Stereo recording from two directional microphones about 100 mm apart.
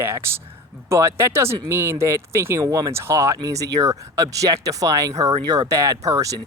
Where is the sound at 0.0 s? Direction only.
25° right (ahead or behind).